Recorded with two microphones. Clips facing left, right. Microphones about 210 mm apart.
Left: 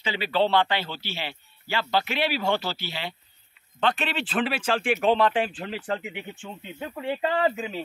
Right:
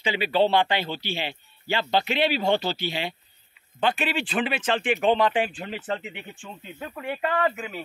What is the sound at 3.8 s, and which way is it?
Speech, 5° right (ahead or behind).